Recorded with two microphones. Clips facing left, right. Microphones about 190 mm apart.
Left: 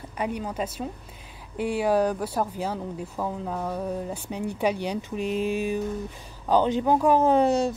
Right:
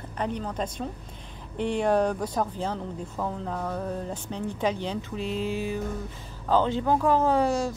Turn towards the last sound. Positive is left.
turn(degrees=20)  # may be behind; listen again after turning